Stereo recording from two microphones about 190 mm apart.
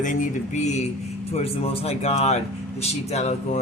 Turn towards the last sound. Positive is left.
turn(degrees=35)  # may be behind; listen again after turning